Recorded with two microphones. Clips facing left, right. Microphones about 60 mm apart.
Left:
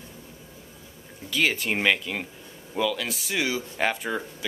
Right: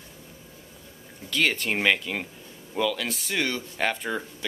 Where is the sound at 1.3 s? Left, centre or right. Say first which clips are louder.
Even; centre.